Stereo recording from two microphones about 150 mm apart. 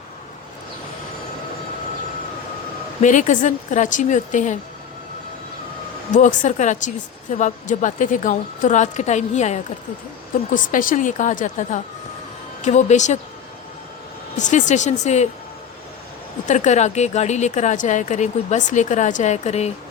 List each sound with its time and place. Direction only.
3.0 s a woman's voice: 55° left (ahead or behind)
6.1 s a woman's voice: 55° left (ahead or behind)
10.5 s a woman's voice: 65° left (ahead or behind)
14.3 s a woman's voice: 55° left (ahead or behind)
16.5 s a woman's voice: 55° left (ahead or behind)